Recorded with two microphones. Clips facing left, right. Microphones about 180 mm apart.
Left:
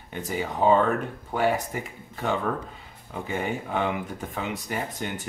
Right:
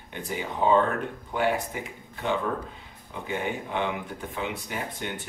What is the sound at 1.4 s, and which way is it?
Speech, 45° left (ahead or behind).